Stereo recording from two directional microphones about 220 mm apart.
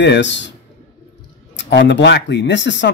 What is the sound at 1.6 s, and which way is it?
A man's voice, 50° left (ahead or behind).